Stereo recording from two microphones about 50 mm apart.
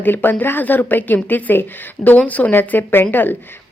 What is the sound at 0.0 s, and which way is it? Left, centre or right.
A woman's voice, left.